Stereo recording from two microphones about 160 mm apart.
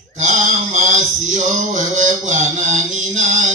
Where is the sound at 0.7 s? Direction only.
50° right (ahead or behind).